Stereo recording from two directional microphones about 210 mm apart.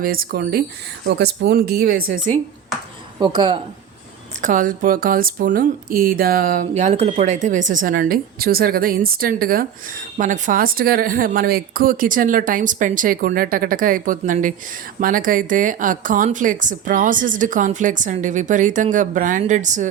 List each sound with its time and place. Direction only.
0.0 s a woman's voice: 45° right (ahead or behind)
3.2 s a woman's voice: 20° right (ahead or behind)
4.4 s a woman's voice: 40° right (ahead or behind)